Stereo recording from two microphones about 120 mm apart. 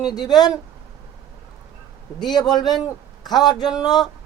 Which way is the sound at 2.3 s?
35° left (ahead or behind).